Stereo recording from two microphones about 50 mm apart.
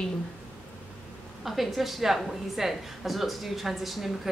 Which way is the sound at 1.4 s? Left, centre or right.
Centre.